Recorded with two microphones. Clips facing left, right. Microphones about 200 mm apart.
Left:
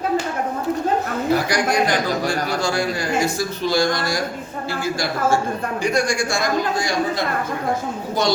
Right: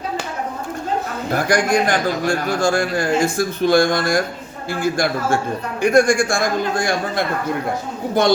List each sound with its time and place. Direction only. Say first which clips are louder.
1.3 s a man's voice: right 3 dB; 50° right (ahead or behind)